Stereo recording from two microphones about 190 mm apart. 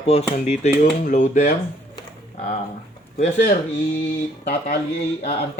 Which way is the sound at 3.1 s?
40° left (ahead or behind).